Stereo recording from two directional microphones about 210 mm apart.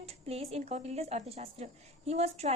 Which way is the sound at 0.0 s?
30° right (ahead or behind).